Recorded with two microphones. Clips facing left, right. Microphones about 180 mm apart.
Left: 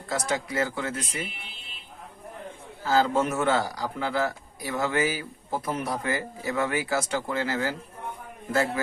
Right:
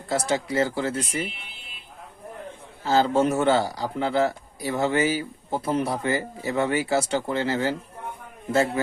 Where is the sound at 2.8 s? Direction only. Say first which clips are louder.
Right 3 dB; 25° right (ahead or behind).